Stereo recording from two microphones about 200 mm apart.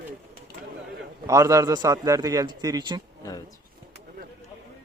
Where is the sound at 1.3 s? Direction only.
15° right (ahead or behind).